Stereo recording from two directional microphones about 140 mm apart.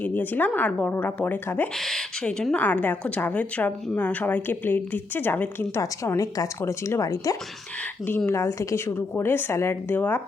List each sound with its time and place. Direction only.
0.0 s a woman's voice: 15° left (ahead or behind)
1.7 s a woman's voice: centre (ahead or behind)